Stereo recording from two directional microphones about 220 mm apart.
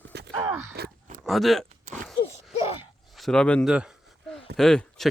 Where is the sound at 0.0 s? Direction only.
50° right (ahead or behind).